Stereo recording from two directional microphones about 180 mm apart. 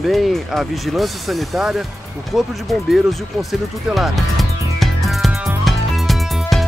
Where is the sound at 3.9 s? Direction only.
Centre (ahead or behind).